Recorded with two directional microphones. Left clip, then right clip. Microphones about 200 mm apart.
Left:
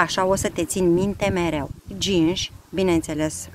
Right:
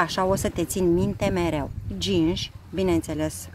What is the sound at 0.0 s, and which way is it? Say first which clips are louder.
Speech: left 3 dB; 5° left (ahead or behind).